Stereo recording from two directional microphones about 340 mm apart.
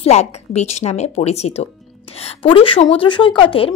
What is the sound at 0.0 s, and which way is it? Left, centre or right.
Speech, centre.